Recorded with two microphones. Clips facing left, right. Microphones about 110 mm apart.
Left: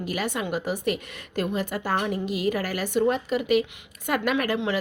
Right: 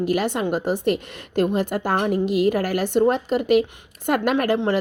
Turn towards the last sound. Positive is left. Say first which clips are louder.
# right 5 dB
turn(degrees=-50)  # may be behind; listen again after turning